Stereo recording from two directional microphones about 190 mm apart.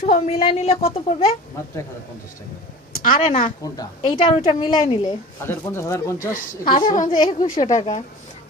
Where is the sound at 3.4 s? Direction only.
20° left (ahead or behind).